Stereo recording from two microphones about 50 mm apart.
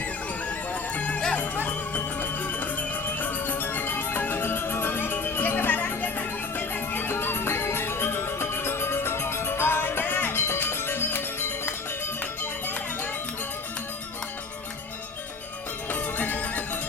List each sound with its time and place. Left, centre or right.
0.0 s music: left
15.9 s music: left